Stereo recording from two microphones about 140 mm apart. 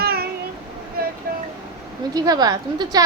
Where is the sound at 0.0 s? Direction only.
90° right.